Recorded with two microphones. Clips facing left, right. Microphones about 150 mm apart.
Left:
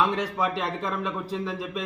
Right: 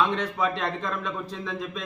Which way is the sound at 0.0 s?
10° left (ahead or behind).